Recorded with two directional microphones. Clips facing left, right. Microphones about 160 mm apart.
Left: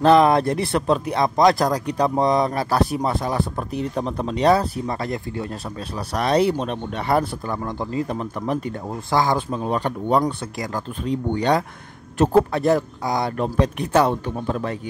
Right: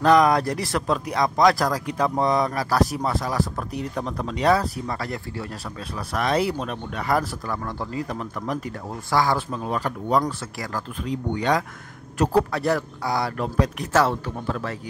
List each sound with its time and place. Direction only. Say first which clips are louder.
0.0 s speech: left 3 dB; 25° left (ahead or behind)
11.1 s speech: left 3 dB; 30° left (ahead or behind)